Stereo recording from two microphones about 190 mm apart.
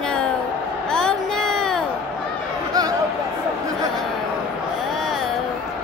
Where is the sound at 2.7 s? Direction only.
20° right (ahead or behind).